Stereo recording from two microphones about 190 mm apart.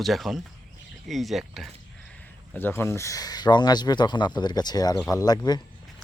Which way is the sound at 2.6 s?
10° left (ahead or behind).